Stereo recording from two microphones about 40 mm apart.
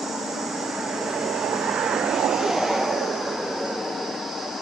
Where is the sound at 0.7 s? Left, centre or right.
Centre.